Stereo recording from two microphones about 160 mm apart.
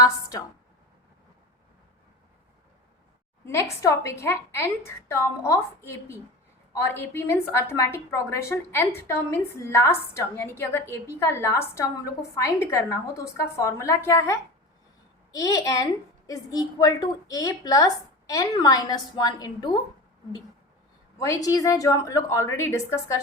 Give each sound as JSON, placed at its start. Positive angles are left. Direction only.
{"t": 0.0, "sound": "a woman's voice", "side_deg": 20}
{"t": 3.4, "sound": "a woman's voice", "side_deg": 15}
{"t": 21.2, "sound": "a woman's voice", "side_deg": 20}